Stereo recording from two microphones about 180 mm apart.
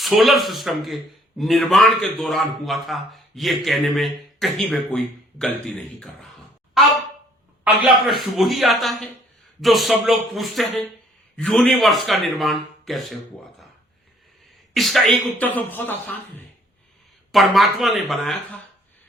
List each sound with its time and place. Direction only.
0.0 s a man's voice: centre (ahead or behind)
7.6 s a man's voice: centre (ahead or behind)
14.7 s speech: centre (ahead or behind)
17.3 s a man's voice: centre (ahead or behind)